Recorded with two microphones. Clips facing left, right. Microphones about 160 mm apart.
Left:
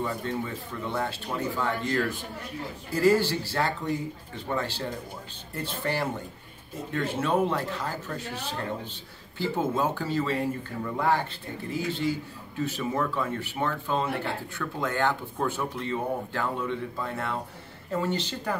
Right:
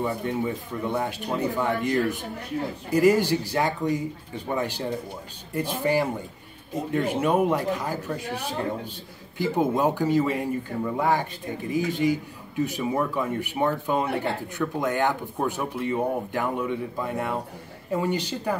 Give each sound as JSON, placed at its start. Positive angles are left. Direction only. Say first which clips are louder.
{"t": 0.0, "sound": "speech", "louder": "right 4 dB", "side_deg": -15}